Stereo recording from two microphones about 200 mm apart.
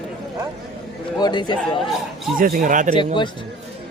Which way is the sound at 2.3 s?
45° right (ahead or behind).